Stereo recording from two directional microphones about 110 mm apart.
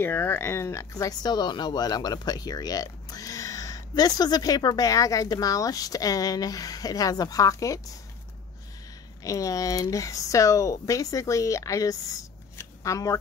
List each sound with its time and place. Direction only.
0.0 s speech: 20° left (ahead or behind)
9.2 s speech: 30° left (ahead or behind)